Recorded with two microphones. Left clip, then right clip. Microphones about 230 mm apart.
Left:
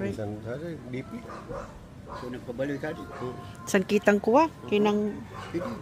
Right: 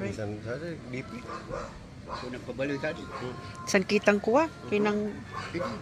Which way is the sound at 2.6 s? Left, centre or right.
Left.